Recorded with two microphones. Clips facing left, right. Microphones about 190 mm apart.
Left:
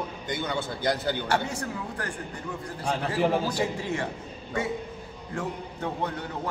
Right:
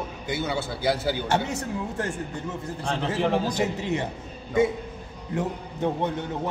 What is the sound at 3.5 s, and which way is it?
Speech, 20° right (ahead or behind).